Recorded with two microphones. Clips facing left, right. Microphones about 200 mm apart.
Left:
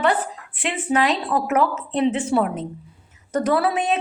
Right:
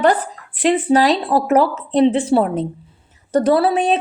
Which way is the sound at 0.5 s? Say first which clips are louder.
Right 8 dB; 35° right (ahead or behind).